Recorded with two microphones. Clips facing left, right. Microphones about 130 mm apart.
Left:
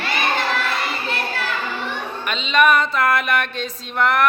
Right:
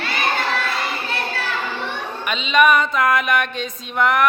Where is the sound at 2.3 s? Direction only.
Centre (ahead or behind).